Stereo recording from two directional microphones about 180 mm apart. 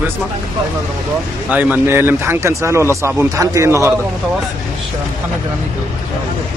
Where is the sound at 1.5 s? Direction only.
10° right (ahead or behind).